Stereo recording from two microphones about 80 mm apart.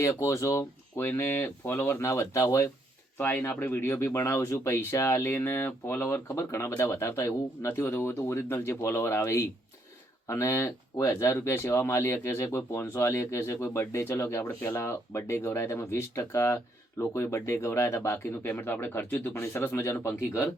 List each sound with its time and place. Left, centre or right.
0.0 s speech: left
3.2 s speech: left